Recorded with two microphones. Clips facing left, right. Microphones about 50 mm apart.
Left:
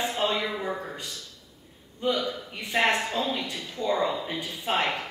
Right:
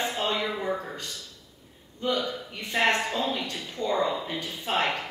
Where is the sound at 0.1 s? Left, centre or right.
Centre.